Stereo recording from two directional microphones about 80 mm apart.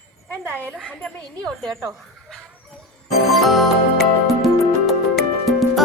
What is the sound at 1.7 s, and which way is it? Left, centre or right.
Speech, right.